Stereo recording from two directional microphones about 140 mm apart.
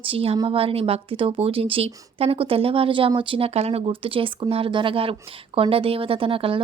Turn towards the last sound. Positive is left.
turn(degrees=-40)  # may be behind; listen again after turning